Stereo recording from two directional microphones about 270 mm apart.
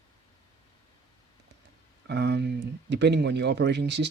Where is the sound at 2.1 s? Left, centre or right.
Right.